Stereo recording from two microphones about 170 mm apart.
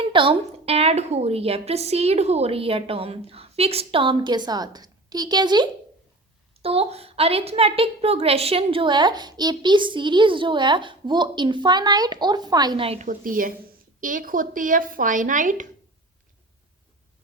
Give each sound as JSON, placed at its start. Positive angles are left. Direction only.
{"t": 0.0, "sound": "a woman's voice", "side_deg": -30}
{"t": 6.6, "sound": "a woman's voice", "side_deg": -35}
{"t": 13.1, "sound": "speech", "side_deg": -55}